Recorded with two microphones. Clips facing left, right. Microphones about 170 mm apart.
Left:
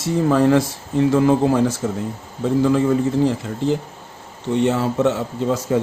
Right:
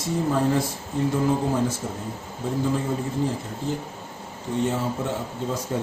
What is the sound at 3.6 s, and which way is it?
A man's voice, 90° left.